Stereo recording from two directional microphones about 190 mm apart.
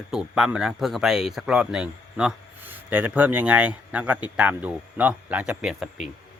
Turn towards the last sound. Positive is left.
turn(degrees=-5)  # may be behind; listen again after turning